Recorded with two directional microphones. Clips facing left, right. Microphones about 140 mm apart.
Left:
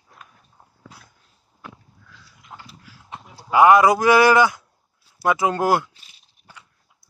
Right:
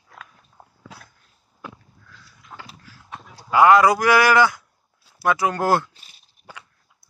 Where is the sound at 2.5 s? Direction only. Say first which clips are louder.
Right 1 dB; 15° left (ahead or behind).